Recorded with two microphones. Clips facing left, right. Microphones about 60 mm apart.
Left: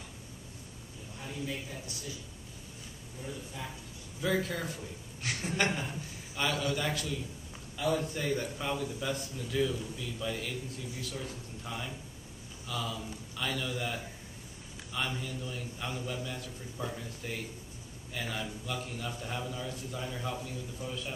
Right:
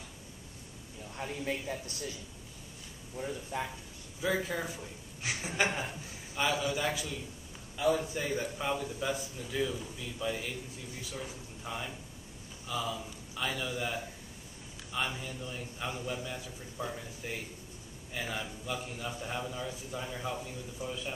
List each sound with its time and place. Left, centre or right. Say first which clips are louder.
1.1 s a man's voice: right 3 dB; right
3.5 s speech: right 9 dB; right
4.2 s a man's voice: left 1 dB; centre